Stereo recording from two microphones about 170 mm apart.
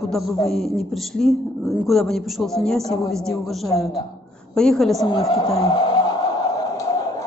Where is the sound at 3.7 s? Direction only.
20° left (ahead or behind).